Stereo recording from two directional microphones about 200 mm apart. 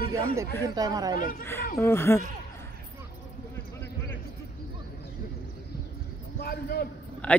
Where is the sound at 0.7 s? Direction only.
20° right (ahead or behind).